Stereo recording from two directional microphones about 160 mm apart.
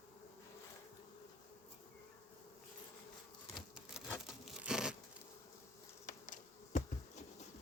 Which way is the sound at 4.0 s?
40° left (ahead or behind).